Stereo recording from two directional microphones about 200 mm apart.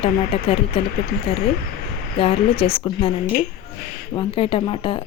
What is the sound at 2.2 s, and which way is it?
Speech, 30° left (ahead or behind).